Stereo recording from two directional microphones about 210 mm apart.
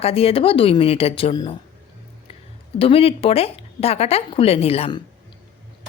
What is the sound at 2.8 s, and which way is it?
Speech, 25° left (ahead or behind).